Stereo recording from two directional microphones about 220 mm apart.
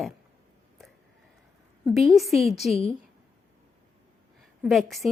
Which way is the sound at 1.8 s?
Centre (ahead or behind).